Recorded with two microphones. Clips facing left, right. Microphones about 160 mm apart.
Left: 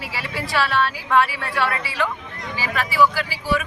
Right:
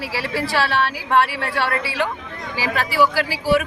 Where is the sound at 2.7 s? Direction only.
35° right (ahead or behind).